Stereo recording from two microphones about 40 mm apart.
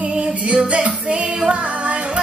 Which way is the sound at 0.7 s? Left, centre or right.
Right.